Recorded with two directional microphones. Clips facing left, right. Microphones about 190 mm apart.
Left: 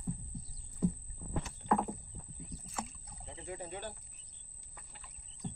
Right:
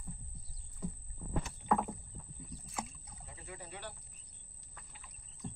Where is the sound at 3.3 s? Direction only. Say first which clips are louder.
Left 7 dB; 25° left (ahead or behind).